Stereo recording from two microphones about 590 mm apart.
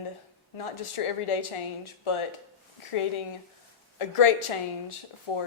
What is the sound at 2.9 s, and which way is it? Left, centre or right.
Speech, left.